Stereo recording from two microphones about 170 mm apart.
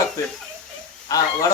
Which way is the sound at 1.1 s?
20° left (ahead or behind).